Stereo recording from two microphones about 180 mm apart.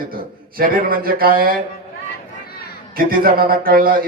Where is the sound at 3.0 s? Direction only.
55° right (ahead or behind).